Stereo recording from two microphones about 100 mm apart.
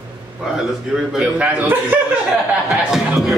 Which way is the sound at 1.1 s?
15° right (ahead or behind).